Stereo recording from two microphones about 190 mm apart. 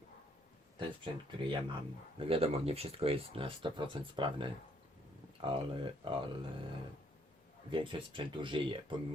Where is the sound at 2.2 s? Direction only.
30° right (ahead or behind).